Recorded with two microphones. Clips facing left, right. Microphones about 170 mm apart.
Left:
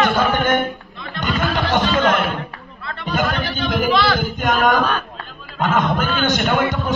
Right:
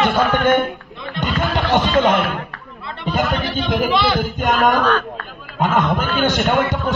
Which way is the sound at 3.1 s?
25° right (ahead or behind).